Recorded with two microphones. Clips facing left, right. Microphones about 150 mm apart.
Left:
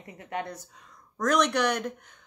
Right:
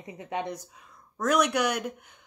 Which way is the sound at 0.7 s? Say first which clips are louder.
Even; 5° right (ahead or behind).